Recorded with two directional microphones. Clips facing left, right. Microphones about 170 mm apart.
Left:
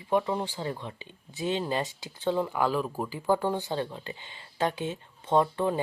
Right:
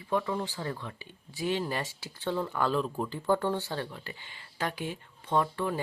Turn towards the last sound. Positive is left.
turn(degrees=25)  # may be behind; listen again after turning